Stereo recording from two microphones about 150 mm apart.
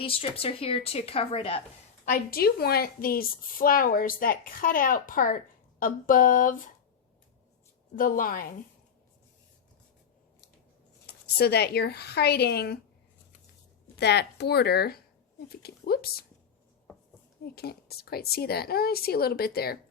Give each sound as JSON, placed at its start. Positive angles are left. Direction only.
{"t": 0.0, "sound": "a woman's voice", "side_deg": 40}
{"t": 2.0, "sound": "a woman's voice", "side_deg": 75}
{"t": 5.8, "sound": "a sound", "side_deg": 65}
{"t": 7.9, "sound": "a woman's voice", "side_deg": 65}
{"t": 11.0, "sound": "a woman's voice", "side_deg": 90}
{"t": 13.9, "sound": "speech", "side_deg": 90}
{"t": 17.4, "sound": "a woman's voice", "side_deg": 90}